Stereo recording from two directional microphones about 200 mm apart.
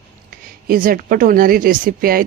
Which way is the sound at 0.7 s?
45° right (ahead or behind).